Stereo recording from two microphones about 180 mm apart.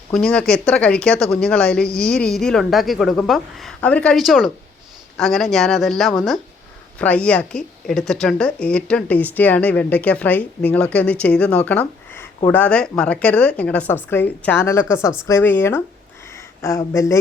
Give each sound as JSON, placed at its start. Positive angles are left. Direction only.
{"t": 0.1, "sound": "speech", "side_deg": 5}